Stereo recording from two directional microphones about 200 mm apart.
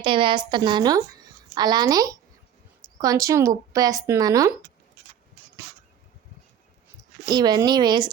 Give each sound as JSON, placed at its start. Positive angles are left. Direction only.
{"t": 0.0, "sound": "a woman's voice", "side_deg": -25}
{"t": 7.3, "sound": "a woman's voice", "side_deg": -20}